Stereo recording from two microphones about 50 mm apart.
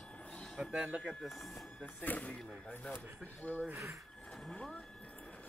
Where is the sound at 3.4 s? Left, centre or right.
Left.